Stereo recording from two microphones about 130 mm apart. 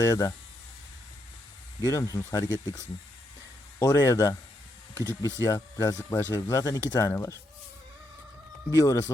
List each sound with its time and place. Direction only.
0.0 s speech: 30° left (ahead or behind)
1.8 s speech: 25° left (ahead or behind)
8.7 s speech: 25° left (ahead or behind)